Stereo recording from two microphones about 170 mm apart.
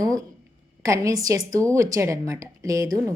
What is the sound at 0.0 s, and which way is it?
A woman's voice, 20° right (ahead or behind).